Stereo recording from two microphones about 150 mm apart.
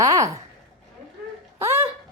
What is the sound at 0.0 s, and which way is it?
Speech, 20° right (ahead or behind).